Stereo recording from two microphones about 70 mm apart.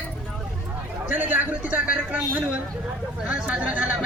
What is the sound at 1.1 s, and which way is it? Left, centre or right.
A man's voice, right.